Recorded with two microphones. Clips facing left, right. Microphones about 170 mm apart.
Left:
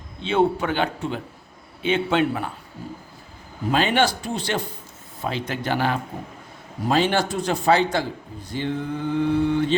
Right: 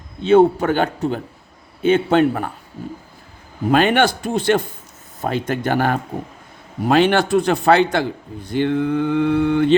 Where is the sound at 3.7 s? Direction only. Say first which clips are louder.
Right 5 dB; 55° right (ahead or behind).